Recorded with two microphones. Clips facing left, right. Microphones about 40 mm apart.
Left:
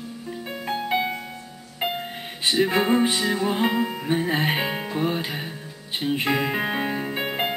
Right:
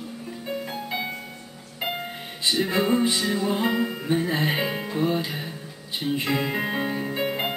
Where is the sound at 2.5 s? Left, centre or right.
Left.